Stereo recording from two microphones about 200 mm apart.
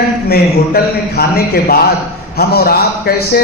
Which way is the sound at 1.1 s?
50° left (ahead or behind).